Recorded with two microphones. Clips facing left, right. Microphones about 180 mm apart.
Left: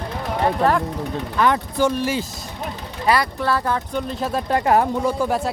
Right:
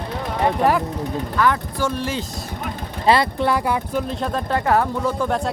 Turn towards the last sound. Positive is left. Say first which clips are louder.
# left 1 dB
turn(degrees=5)  # may be behind; listen again after turning